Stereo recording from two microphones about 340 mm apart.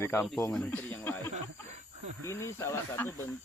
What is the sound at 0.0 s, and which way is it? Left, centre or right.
Speech, centre.